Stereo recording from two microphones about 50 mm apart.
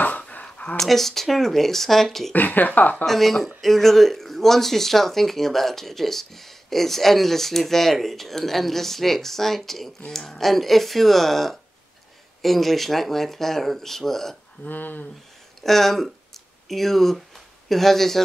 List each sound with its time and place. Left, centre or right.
0.0 s a sound: left
0.7 s speech: centre
2.3 s speech: left
3.1 s speech: centre
14.6 s speech: left
15.6 s speech: centre